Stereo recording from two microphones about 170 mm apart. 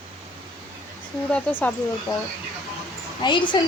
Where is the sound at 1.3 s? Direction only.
10° left (ahead or behind).